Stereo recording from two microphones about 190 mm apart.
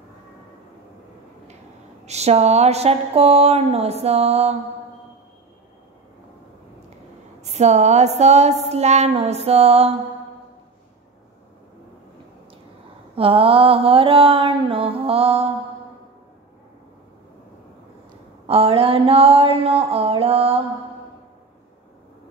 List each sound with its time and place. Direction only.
2.0 s speech: 35° right (ahead or behind)
7.4 s speech: 35° right (ahead or behind)
13.1 s mantra: 30° right (ahead or behind)
18.5 s speech: 30° right (ahead or behind)